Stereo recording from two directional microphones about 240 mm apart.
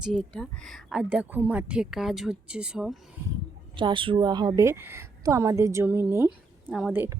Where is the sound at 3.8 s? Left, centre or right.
Right.